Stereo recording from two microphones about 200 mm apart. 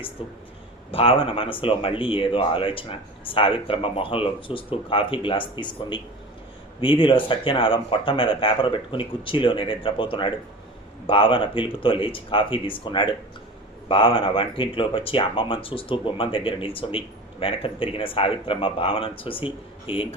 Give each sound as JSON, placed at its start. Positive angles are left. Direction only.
{"t": 0.2, "sound": "speech", "side_deg": 25}